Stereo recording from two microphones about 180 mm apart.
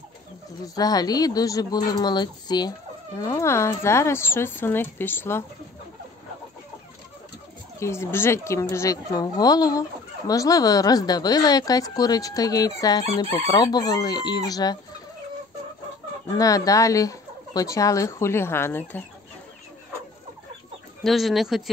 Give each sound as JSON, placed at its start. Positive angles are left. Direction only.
{"t": 0.7, "sound": "a woman's voice", "side_deg": 20}
{"t": 7.8, "sound": "a woman's voice", "side_deg": 15}
{"t": 16.3, "sound": "speech", "side_deg": 20}
{"t": 21.0, "sound": "speech", "side_deg": 0}